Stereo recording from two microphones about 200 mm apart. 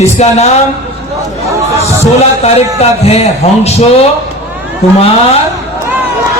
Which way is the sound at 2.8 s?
30° left (ahead or behind).